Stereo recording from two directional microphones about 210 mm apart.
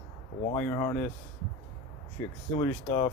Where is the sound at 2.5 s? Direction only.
25° left (ahead or behind).